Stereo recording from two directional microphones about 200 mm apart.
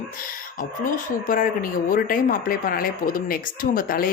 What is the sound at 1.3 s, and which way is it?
Speech, 45° left (ahead or behind).